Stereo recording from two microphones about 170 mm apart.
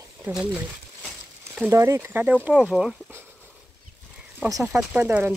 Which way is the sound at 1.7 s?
15° right (ahead or behind).